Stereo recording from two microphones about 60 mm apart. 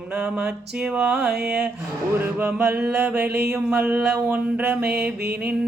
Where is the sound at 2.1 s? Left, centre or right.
Right.